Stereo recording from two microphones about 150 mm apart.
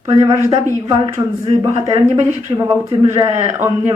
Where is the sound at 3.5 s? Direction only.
20° right (ahead or behind).